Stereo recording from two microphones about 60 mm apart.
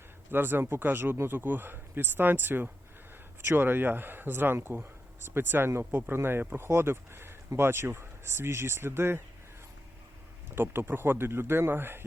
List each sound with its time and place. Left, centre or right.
0.3 s speech: right
10.5 s speech: right